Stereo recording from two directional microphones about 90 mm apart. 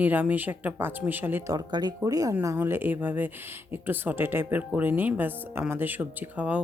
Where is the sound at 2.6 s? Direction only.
25° right (ahead or behind).